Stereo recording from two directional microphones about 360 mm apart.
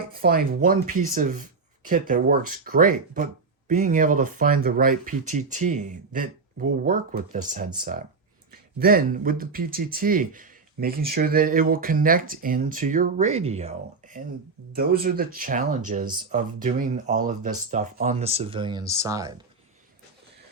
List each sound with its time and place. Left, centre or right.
0.1 s speech: right